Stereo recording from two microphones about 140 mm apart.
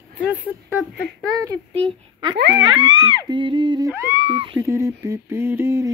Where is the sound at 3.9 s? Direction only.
20° right (ahead or behind).